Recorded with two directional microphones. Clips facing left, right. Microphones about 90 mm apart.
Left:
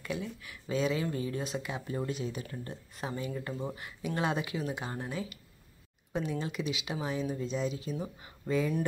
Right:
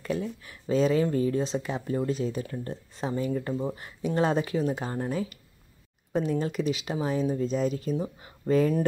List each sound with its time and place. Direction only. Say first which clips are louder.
0.0 s speech: right 6 dB; 40° right (ahead or behind)
3.2 s speech: right 9 dB; 40° right (ahead or behind)
8.5 s speech: right 7 dB; 50° right (ahead or behind)